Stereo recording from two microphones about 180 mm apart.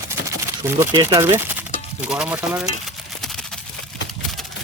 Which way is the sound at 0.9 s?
20° right (ahead or behind).